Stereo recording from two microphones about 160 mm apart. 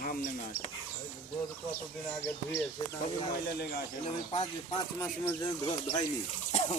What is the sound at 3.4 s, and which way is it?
Speech, 80° left.